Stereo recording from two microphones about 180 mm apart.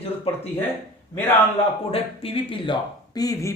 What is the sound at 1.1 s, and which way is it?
Speech, 15° left (ahead or behind).